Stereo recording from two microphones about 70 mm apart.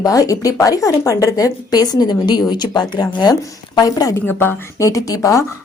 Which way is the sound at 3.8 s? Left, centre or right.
Left.